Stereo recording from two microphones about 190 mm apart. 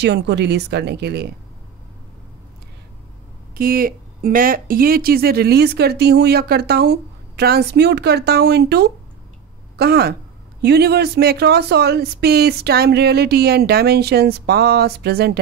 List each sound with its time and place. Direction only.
0.0 s speech: 65° right (ahead or behind)
3.5 s speech: 50° right (ahead or behind)